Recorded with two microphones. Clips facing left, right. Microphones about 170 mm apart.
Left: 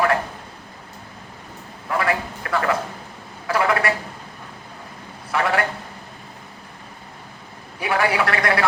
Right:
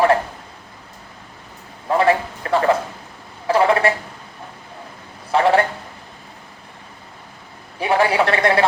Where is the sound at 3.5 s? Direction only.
25° right (ahead or behind).